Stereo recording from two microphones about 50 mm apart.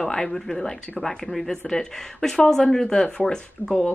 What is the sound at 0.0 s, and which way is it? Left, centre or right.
A woman's voice, centre.